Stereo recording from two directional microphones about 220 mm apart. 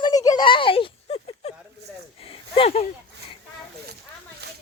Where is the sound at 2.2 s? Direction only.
25° left (ahead or behind).